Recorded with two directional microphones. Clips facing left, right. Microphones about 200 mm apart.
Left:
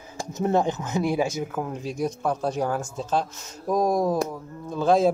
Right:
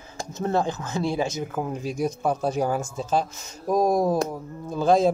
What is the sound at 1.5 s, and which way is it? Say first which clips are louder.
Speech: right 1 dB; 5° right (ahead or behind).